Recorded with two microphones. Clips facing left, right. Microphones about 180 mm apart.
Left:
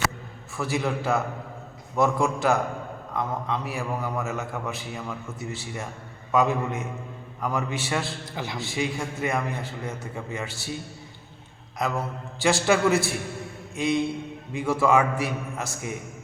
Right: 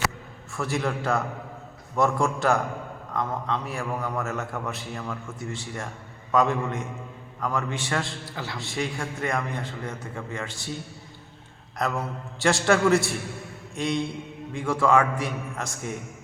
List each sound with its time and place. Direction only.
0.5 s a man's voice: centre (ahead or behind)
8.2 s a man's voice: 15° left (ahead or behind)
8.5 s a man's voice: centre (ahead or behind)
11.8 s a man's voice: centre (ahead or behind)